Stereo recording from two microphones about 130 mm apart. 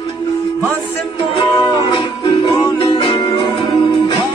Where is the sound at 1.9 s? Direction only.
40° left (ahead or behind).